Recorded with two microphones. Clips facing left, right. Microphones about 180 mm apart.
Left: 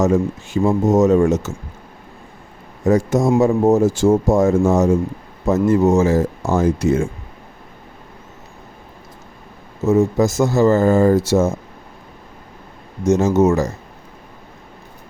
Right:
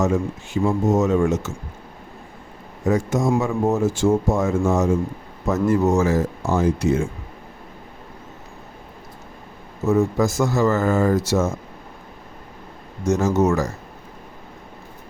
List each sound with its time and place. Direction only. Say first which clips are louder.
0.0 s speech: left 4 dB; 40° left (ahead or behind)
2.8 s speech: left 4 dB; 40° left (ahead or behind)
5.5 s speech: left 4 dB; 25° left (ahead or behind)
6.4 s speech: left 3 dB; 45° left (ahead or behind)
9.8 s speech: left 4 dB; 20° left (ahead or behind)
13.1 s speech: left 4 dB; 25° left (ahead or behind)